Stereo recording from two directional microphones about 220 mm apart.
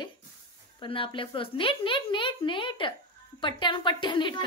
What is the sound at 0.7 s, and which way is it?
Speech, 25° left (ahead or behind).